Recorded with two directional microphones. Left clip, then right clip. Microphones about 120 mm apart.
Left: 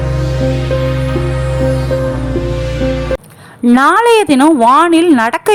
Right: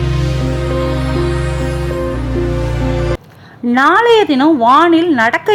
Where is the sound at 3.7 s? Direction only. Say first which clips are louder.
Left 1 dB; 40° left (ahead or behind).